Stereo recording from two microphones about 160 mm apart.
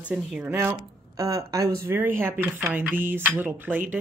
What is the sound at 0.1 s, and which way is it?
Speech, 10° right (ahead or behind).